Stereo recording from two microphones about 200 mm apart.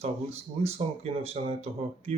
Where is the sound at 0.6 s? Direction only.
30° right (ahead or behind).